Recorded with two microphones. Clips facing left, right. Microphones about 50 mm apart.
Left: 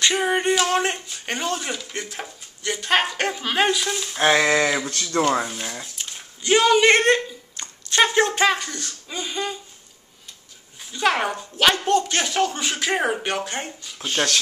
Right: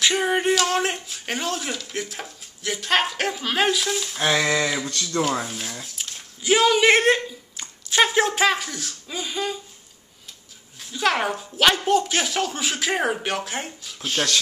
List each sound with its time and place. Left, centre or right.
0.0 s speech: centre
4.2 s a sound: left
5.4 s speech: centre
10.8 s speech: centre